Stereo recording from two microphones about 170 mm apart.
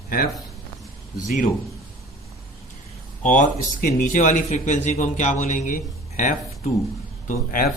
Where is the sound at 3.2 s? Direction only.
50° left (ahead or behind).